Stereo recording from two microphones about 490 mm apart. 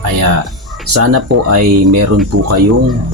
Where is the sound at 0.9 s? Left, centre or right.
Right.